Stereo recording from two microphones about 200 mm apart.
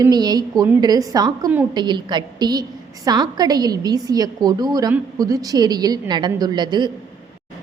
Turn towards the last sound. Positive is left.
turn(degrees=-20)  # may be behind; listen again after turning